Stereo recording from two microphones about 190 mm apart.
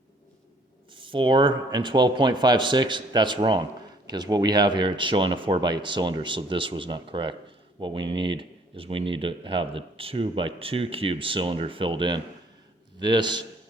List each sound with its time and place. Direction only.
0.9 s speech: 25° right (ahead or behind)